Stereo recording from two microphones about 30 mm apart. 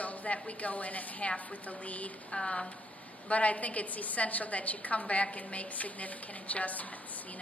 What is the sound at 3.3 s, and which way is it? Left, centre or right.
A woman's voice, left.